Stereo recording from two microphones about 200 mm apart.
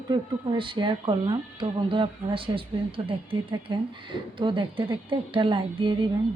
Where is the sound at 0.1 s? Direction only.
25° right (ahead or behind).